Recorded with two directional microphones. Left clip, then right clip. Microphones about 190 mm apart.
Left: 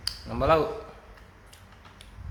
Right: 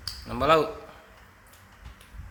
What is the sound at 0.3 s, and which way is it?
Speech, 20° right (ahead or behind).